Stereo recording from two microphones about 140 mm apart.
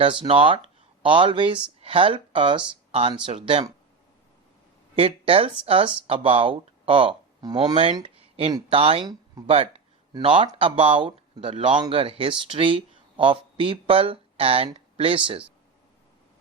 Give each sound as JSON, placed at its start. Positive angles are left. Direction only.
{"t": 0.0, "sound": "speech", "side_deg": -40}
{"t": 4.9, "sound": "speech", "side_deg": -40}